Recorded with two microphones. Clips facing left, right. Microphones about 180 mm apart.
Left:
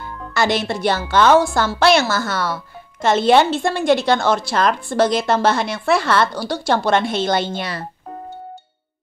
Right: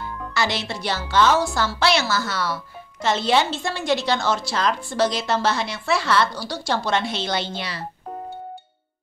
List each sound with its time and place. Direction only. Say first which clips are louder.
0.3 s a woman's voice: left 7 dB; 50° left (ahead or behind)